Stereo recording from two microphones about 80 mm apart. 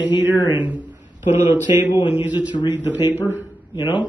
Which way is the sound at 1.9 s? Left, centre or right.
Left.